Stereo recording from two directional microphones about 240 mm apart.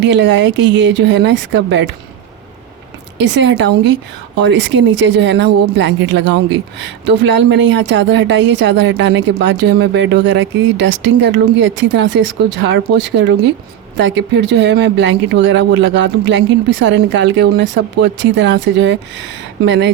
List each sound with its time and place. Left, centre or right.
0.0 s speech: right
3.2 s speech: right